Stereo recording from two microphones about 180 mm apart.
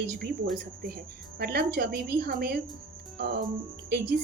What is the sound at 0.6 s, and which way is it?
A woman's voice, 60° right (ahead or behind).